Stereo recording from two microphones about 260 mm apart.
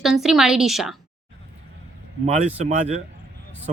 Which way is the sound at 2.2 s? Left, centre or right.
Right.